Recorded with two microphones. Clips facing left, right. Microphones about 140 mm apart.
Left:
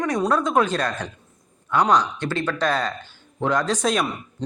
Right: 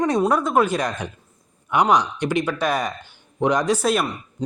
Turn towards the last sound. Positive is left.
turn(degrees=-5)  # may be behind; listen again after turning